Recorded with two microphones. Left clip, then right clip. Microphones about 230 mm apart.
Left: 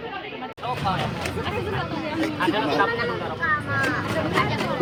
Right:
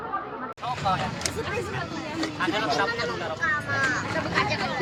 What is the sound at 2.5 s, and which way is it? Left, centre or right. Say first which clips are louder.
Speech: left 2 dB; right.